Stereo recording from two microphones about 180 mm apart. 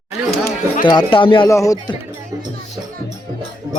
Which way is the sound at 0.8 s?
25° left (ahead or behind).